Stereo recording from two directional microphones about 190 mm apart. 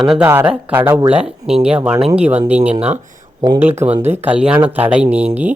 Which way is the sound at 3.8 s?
10° right (ahead or behind).